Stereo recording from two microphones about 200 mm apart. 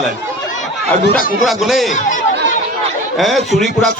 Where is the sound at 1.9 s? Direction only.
40° left (ahead or behind).